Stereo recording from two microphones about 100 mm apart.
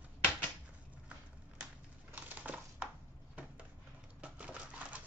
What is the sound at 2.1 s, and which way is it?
Crushing, 15° right (ahead or behind).